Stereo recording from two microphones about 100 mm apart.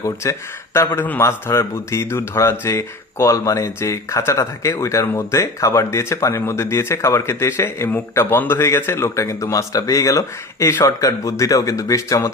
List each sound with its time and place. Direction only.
0.0 s speech: 30° left (ahead or behind)
0.9 s speech: 20° left (ahead or behind)